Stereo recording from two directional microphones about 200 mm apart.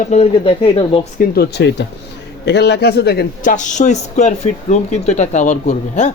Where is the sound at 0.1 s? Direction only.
30° left (ahead or behind).